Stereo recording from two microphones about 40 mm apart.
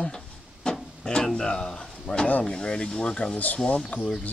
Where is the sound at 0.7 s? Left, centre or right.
Centre.